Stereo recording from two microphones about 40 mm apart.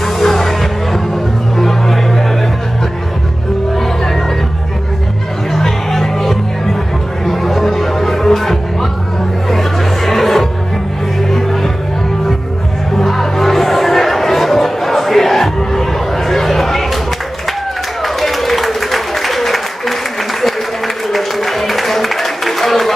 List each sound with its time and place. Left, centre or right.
0.0 s music: centre
3.7 s music: centre
5.5 s music: centre
12.9 s music: centre
18.0 s applause: centre
20.4 s a sound: centre